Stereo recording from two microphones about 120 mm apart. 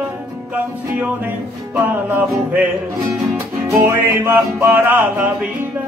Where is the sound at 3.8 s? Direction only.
15° right (ahead or behind).